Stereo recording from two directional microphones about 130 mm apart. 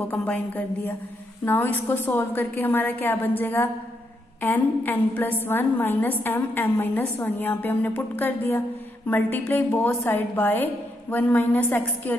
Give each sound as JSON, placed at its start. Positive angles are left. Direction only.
{"t": 0.1, "sound": "a woman's voice", "side_deg": 10}